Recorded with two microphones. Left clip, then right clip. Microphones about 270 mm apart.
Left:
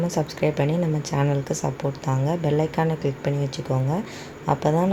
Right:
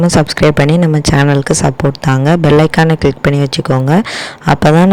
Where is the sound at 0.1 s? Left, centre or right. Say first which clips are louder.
Right 14 dB; right.